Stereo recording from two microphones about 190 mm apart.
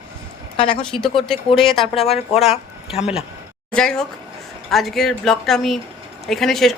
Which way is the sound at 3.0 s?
5° right (ahead or behind).